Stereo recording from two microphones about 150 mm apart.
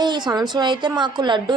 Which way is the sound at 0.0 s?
30° right (ahead or behind).